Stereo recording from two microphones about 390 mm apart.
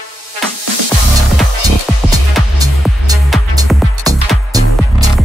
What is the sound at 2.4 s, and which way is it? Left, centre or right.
Music, centre.